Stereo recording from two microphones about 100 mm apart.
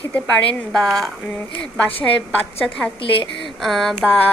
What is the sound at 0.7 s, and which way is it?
A woman's voice, 5° left (ahead or behind).